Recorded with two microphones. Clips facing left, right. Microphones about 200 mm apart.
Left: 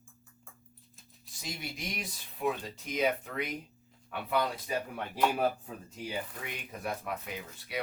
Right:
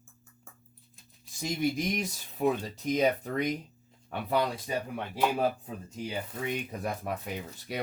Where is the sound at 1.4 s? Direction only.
45° right (ahead or behind).